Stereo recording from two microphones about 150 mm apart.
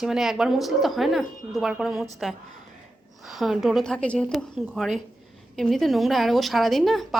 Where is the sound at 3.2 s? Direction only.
Centre (ahead or behind).